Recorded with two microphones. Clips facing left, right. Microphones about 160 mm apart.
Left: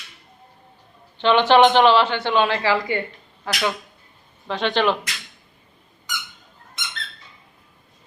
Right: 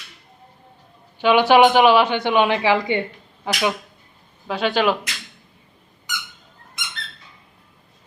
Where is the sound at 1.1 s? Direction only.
10° right (ahead or behind).